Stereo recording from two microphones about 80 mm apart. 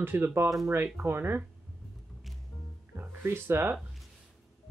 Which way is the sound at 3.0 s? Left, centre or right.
Right.